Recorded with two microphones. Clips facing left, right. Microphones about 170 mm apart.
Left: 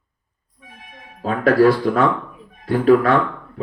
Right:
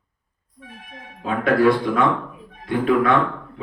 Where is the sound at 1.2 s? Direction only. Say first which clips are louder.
Left 3 dB; 40° left (ahead or behind).